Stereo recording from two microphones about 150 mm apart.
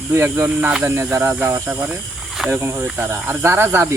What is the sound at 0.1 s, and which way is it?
Speech, 15° right (ahead or behind).